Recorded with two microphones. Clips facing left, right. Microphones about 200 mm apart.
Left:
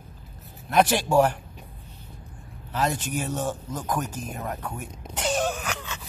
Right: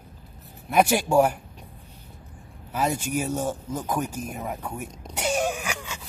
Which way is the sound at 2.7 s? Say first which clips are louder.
Right 1 dB; 10° right (ahead or behind).